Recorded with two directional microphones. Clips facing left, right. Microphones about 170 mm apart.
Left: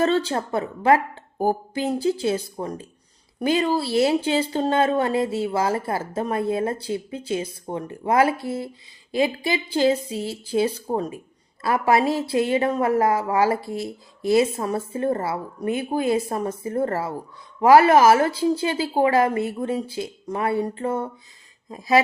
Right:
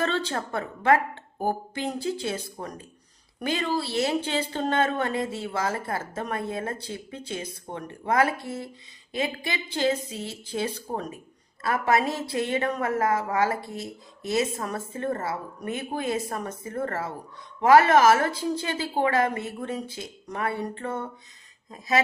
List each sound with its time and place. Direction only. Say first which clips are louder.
0.0 s a woman's voice: left 6 dB; 30° left (ahead or behind)
9.7 s a woman's voice: left 5 dB; 30° left (ahead or behind)